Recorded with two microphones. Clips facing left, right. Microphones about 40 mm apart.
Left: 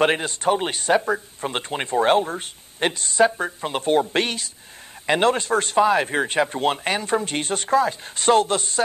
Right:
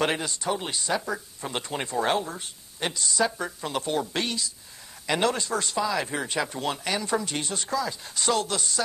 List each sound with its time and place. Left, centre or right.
0.0 s speech: left